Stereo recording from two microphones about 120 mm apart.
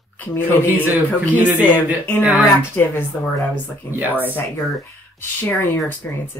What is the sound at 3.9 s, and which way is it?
Speech, 15° right (ahead or behind).